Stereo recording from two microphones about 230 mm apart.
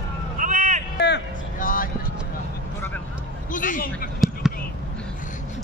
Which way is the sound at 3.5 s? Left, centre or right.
Left.